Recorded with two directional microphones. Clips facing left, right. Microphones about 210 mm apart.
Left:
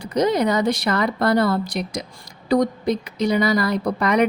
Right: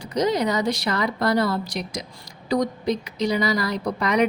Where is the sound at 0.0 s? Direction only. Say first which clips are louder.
Left 3 dB; 55° left (ahead or behind).